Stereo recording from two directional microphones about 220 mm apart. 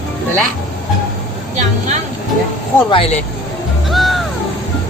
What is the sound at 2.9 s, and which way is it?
Speech, 25° left (ahead or behind).